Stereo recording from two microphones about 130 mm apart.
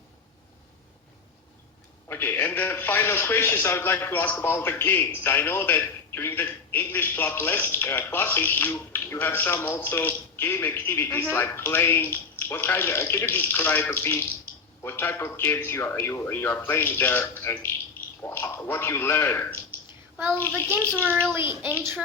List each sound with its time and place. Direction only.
2.0 s a man's voice: 15° left (ahead or behind)
20.6 s a man's voice: 15° left (ahead or behind)
21.0 s a child's voice: 15° right (ahead or behind)